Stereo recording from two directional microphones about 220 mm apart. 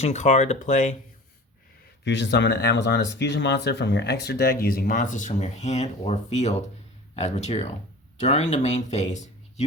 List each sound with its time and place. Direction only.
0.0 s speech: 30° left (ahead or behind)
2.0 s speech: 55° left (ahead or behind); by 9.6 s 30° left (ahead or behind)